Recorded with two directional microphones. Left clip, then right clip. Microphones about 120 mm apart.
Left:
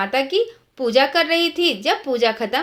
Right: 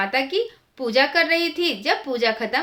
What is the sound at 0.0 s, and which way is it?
A woman's voice, 35° left (ahead or behind).